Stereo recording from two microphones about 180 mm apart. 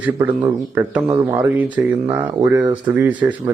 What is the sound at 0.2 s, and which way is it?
Speech, 10° right (ahead or behind).